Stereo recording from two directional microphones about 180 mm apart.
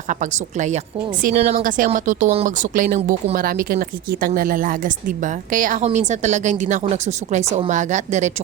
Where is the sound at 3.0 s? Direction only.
35° right (ahead or behind).